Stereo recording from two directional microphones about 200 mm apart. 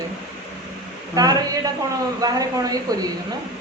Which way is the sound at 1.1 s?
20° right (ahead or behind).